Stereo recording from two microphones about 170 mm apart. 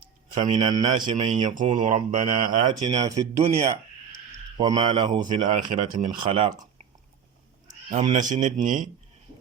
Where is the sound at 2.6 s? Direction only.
25° right (ahead or behind).